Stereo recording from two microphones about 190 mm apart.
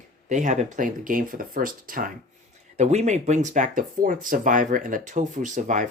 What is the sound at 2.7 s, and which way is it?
Speech, 35° right (ahead or behind).